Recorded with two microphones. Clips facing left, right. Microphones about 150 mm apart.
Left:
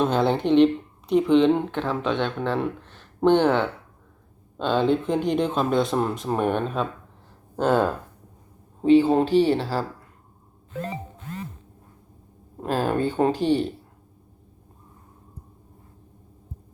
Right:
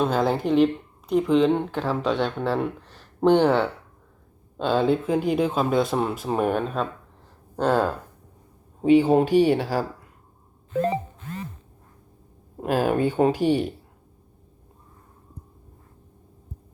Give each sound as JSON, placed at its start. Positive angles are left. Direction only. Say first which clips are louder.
{"t": 0.0, "sound": "speech", "louder": "left 1 dB", "side_deg": -5}
{"t": 8.8, "sound": "speech", "louder": "even", "side_deg": -10}
{"t": 12.5, "sound": "speech", "louder": "right 2 dB", "side_deg": -10}